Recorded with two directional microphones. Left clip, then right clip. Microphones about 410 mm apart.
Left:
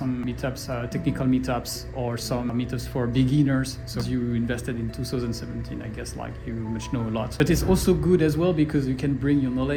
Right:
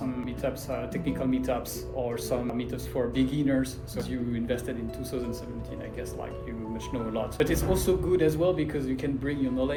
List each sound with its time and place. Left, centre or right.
0.9 s speech: centre
6.9 s speech: centre